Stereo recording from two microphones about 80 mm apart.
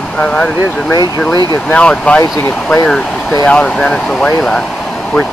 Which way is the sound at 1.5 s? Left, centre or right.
Centre.